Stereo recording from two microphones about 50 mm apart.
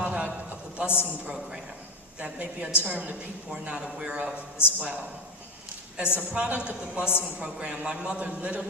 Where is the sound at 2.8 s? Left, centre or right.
Right.